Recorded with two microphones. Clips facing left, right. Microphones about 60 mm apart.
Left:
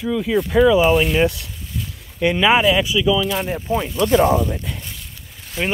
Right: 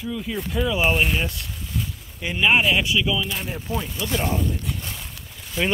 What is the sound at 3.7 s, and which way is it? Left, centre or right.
Speech, left.